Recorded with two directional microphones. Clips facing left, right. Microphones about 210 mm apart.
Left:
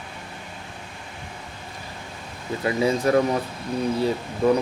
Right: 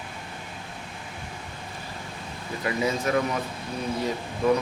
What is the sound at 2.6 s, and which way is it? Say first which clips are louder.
Speech: left 5 dB; 30° left (ahead or behind).